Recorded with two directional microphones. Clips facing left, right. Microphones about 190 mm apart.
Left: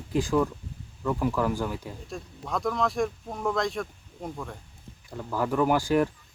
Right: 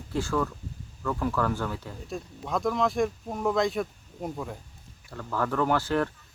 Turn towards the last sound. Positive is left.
turn(degrees=15)  # may be behind; listen again after turning